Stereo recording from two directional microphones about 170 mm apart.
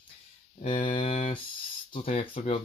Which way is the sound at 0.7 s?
30° left (ahead or behind).